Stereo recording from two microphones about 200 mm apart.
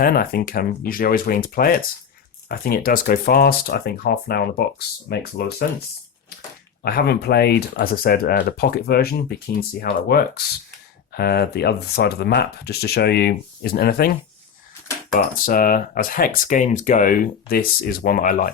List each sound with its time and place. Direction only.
0.0 s speech: 50° left (ahead or behind)
6.8 s speech: 50° left (ahead or behind)